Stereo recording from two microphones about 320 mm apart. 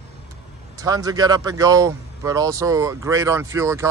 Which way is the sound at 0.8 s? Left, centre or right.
Centre.